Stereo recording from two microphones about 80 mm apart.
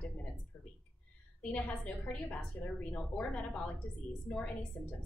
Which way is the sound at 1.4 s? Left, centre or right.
Centre.